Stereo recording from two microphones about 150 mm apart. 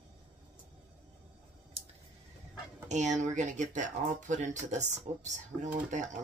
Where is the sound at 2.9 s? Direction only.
55° right (ahead or behind).